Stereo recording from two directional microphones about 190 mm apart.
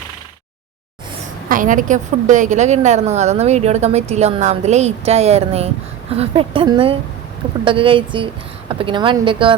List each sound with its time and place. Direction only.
1.5 s a woman's voice: 45° right (ahead or behind); by 9.6 s 25° right (ahead or behind)